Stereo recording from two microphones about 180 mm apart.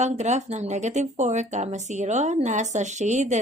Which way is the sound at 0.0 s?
40° right (ahead or behind).